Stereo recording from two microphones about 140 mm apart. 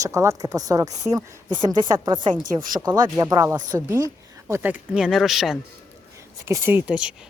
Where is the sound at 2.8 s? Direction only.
25° right (ahead or behind); by 5.5 s centre (ahead or behind).